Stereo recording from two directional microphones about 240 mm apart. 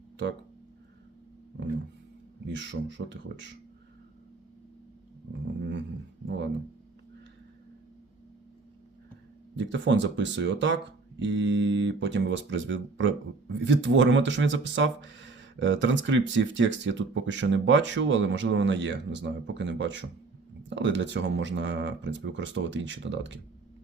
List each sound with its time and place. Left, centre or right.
2.6 s speech: right
5.3 s a sound: right
6.2 s speech: right
9.6 s speech: right